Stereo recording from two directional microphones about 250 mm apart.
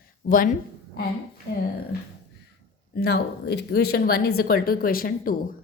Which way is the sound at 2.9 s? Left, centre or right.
Left.